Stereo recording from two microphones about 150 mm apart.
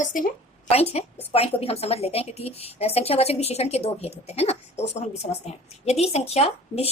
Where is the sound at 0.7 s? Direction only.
45° left (ahead or behind).